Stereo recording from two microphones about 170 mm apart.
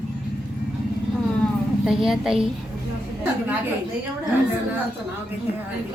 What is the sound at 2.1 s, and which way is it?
Speech, centre (ahead or behind).